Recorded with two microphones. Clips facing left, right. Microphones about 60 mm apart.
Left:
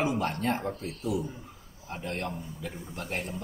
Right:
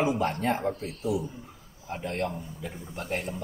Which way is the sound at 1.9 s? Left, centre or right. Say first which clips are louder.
Right 3 dB; right.